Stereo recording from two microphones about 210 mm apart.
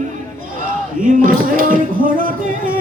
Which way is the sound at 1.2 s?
40° right (ahead or behind).